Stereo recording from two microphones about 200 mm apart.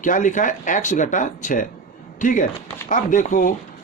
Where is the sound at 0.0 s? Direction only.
40° left (ahead or behind).